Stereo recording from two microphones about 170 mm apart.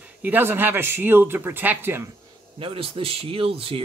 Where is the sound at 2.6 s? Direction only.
35° right (ahead or behind).